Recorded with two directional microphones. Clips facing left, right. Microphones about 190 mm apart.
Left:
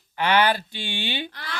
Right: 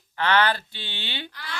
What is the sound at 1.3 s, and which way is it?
Speech, 45° left (ahead or behind).